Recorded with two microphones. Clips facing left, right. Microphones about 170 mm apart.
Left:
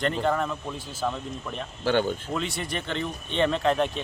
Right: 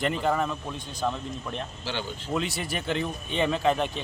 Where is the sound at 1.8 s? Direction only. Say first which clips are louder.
Left 13 dB; 55° left (ahead or behind).